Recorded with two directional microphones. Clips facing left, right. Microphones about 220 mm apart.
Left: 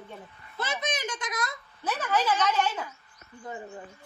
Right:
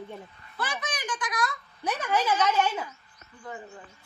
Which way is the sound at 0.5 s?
25° left (ahead or behind).